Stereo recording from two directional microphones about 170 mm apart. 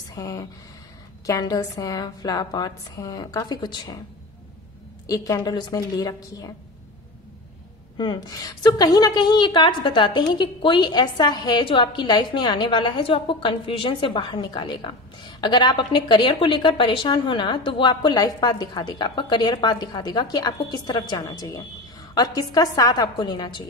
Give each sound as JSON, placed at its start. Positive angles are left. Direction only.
{"t": 0.1, "sound": "a woman's voice", "side_deg": 20}
{"t": 5.0, "sound": "a woman's voice", "side_deg": 20}
{"t": 8.0, "sound": "a woman's voice", "side_deg": 25}